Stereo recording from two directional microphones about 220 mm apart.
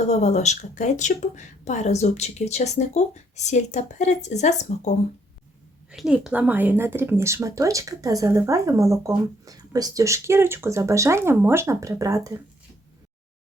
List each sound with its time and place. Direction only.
0.0 s speech: 30° left (ahead or behind)
5.9 s speech: 5° right (ahead or behind)